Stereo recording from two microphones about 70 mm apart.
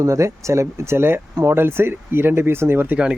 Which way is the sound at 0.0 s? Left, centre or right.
Right.